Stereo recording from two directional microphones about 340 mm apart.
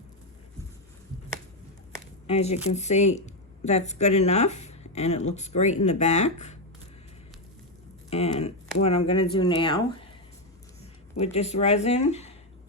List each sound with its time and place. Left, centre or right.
2.2 s speech: centre
8.1 s speech: centre
11.2 s speech: centre